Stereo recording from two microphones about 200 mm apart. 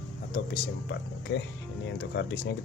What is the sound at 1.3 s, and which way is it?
Speech, 55° left (ahead or behind).